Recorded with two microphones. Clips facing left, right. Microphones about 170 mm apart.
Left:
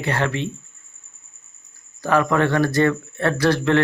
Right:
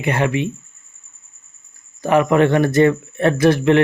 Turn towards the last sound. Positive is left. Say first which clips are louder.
# right 5 dB
turn(degrees=-20)  # may be behind; listen again after turning